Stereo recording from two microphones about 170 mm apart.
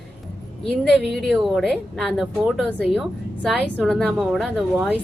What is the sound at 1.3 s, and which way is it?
A woman's voice, 5° right (ahead or behind).